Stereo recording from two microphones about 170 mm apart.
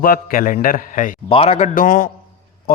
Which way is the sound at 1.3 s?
35° left (ahead or behind).